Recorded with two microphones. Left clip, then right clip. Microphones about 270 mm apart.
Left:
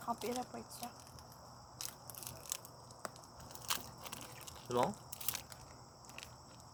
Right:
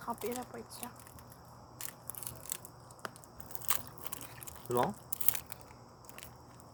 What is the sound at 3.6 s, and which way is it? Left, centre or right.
Biting, right.